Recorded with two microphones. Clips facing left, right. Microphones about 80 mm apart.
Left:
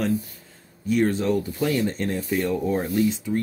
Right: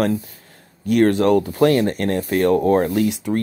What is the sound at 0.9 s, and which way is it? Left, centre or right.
Speech, right.